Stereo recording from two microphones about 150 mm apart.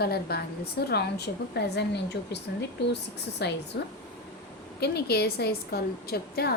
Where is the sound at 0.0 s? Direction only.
90° left.